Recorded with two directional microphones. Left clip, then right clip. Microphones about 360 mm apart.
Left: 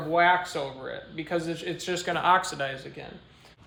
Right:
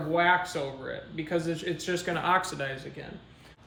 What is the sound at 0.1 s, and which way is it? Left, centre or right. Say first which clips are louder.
Speech: left 2 dB; centre.